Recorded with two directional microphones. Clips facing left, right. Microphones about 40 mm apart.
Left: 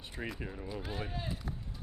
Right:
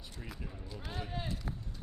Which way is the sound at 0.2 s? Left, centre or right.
Left.